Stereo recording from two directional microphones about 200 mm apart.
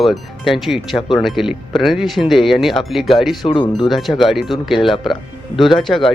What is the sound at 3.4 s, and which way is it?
Speech, 25° left (ahead or behind).